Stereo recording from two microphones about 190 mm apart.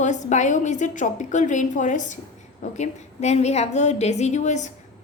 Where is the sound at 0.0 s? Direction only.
40° left (ahead or behind).